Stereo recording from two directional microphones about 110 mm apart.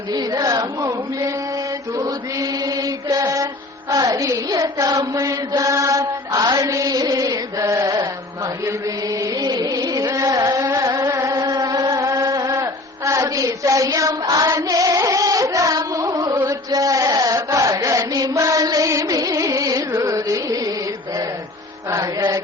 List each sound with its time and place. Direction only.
0.1 s mantra: 35° right (ahead or behind)
2.0 s chant: 30° right (ahead or behind)
5.5 s mantra: 30° right (ahead or behind)
6.8 s music: 30° right (ahead or behind)
7.8 s mantra: 35° right (ahead or behind)
8.6 s chant: 30° right (ahead or behind)
10.7 s music: 30° right (ahead or behind)
13.1 s chant: 30° right (ahead or behind)
14.4 s carnatic music: 40° right (ahead or behind)
16.5 s chant: 30° right (ahead or behind)